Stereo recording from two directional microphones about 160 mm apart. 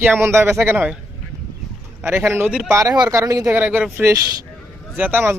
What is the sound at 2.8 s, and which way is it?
Speech, 25° right (ahead or behind).